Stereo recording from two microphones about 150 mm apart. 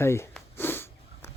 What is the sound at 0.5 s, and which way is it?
Snort, 15° left (ahead or behind).